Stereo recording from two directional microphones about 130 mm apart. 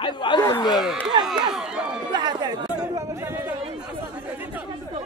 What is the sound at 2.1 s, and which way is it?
Chatter, 35° right (ahead or behind).